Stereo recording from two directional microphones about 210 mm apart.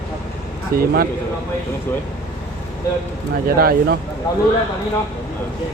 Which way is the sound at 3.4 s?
45° right (ahead or behind).